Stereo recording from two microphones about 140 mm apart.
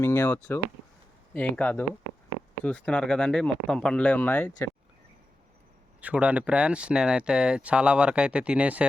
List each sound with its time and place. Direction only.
0.0 s speech: 15° left (ahead or behind)
6.0 s speech: 10° right (ahead or behind)